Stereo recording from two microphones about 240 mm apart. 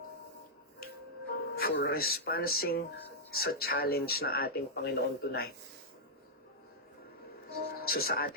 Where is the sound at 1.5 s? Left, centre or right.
Left.